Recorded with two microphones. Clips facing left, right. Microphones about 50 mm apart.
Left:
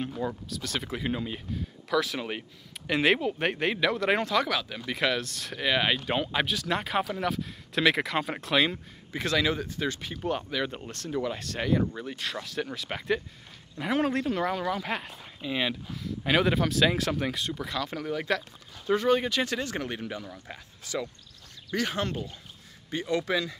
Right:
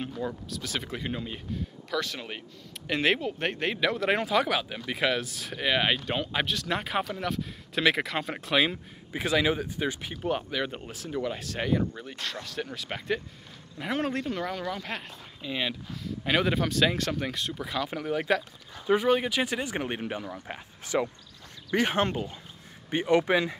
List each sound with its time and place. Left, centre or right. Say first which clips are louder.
0.1 s speech: left 1 dB; centre
9.1 s speech: right 1 dB; centre
19.9 s speech: right 2 dB; right